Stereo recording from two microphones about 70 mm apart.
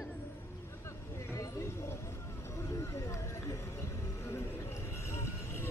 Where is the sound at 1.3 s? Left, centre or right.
Left.